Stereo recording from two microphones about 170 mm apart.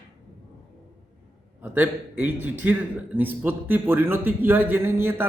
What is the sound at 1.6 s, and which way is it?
A man's voice, 10° right (ahead or behind).